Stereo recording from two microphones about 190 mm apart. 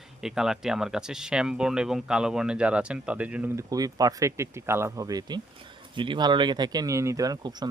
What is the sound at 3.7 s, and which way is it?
Speech, 20° right (ahead or behind).